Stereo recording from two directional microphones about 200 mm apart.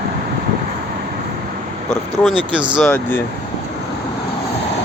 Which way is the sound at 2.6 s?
25° right (ahead or behind).